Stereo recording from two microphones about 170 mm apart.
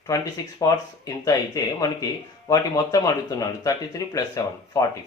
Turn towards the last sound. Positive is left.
turn(degrees=20)  # may be behind; listen again after turning